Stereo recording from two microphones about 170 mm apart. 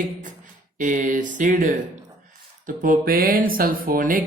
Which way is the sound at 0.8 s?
50° right (ahead or behind).